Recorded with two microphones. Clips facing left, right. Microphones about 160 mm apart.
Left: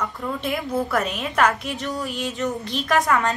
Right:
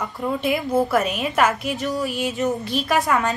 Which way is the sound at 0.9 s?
Centre (ahead or behind).